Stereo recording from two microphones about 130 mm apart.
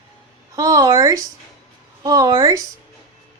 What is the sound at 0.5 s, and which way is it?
Speech, 25° right (ahead or behind).